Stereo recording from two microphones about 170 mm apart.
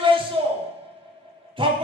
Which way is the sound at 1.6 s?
30° right (ahead or behind).